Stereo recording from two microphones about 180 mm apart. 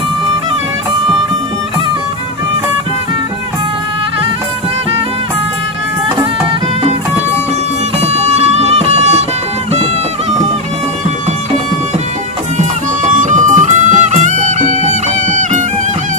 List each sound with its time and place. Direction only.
8.1 s music: 35° right (ahead or behind)
13.1 s music: 45° right (ahead or behind)